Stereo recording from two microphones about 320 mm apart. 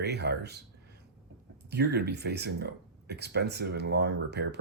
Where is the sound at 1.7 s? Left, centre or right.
Right.